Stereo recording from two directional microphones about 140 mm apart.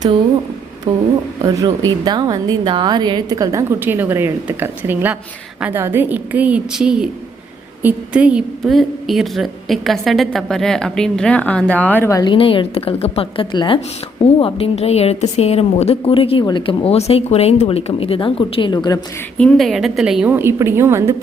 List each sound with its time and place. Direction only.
1.5 s a woman's voice: 30° right (ahead or behind); by 12.2 s 15° left (ahead or behind)
12.2 s a woman's voice: 40° left (ahead or behind)
19.4 s a woman's voice: 5° left (ahead or behind)
20.3 s speech: 15° right (ahead or behind)